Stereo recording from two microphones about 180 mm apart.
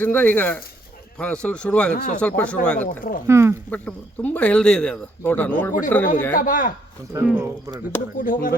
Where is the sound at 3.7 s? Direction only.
10° left (ahead or behind).